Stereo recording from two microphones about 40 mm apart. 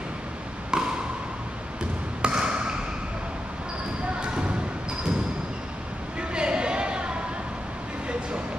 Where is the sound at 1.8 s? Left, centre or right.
Right.